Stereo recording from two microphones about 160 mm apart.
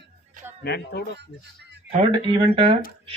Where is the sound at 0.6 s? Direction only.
85° left.